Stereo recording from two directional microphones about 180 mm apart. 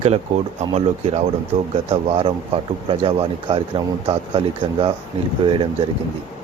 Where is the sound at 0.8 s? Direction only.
35° right (ahead or behind).